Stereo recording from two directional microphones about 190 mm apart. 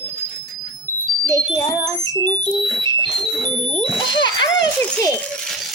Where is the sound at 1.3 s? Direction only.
20° left (ahead or behind).